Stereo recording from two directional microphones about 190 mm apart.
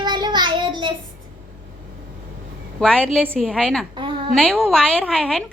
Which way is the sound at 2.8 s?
5° left (ahead or behind).